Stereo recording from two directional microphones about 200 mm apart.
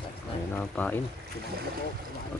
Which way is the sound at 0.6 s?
5° left (ahead or behind).